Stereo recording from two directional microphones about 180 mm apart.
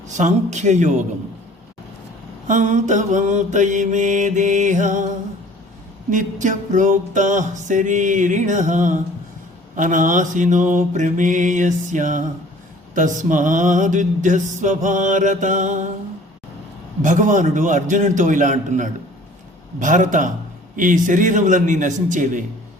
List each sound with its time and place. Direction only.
0.1 s speech: 40° right (ahead or behind)
2.5 s mantra: 45° right (ahead or behind)
6.1 s mantra: 45° right (ahead or behind)
17.0 s mantra: 45° right (ahead or behind)